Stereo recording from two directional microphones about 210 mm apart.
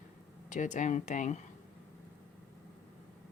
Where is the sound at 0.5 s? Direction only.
35° left (ahead or behind).